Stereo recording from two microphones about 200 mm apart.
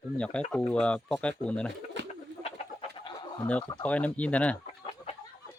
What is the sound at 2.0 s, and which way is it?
Pigeon, 65° right (ahead or behind).